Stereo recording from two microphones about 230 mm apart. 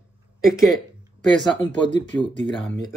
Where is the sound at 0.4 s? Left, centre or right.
Centre.